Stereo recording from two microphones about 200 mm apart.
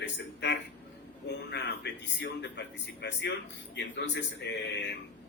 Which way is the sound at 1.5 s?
60° left (ahead or behind).